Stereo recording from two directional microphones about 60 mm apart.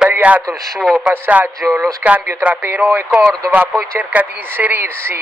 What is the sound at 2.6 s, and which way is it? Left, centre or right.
Speech, right.